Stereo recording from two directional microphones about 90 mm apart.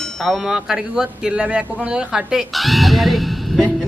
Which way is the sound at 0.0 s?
Centre (ahead or behind).